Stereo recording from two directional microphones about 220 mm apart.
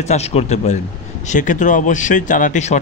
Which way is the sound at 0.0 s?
30° left (ahead or behind).